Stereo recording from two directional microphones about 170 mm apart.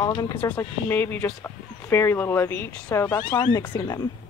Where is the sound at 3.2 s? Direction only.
25° left (ahead or behind).